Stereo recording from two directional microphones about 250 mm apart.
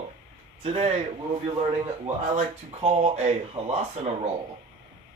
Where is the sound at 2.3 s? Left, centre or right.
Right.